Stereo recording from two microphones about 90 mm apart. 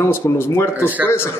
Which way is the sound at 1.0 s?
25° left (ahead or behind).